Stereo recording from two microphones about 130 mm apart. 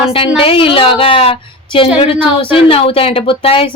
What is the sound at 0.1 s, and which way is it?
Speech, 45° left (ahead or behind).